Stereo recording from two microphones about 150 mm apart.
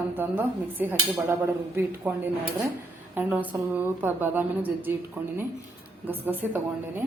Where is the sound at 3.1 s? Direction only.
10° right (ahead or behind).